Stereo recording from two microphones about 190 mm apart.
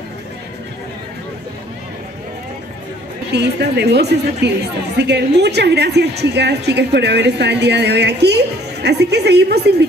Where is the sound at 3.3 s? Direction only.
60° right (ahead or behind).